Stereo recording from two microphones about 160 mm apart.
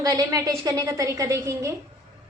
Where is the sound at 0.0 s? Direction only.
25° right (ahead or behind).